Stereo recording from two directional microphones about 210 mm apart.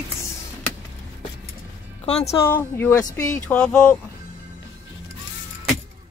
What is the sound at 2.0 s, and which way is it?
Speech, 30° left (ahead or behind).